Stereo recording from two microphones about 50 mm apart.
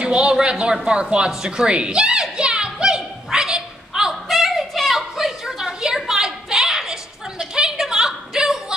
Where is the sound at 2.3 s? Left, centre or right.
Centre.